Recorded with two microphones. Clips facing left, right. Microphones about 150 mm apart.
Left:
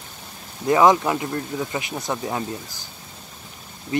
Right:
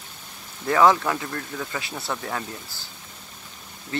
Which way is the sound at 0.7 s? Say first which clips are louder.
Left 2 dB; 20° left (ahead or behind).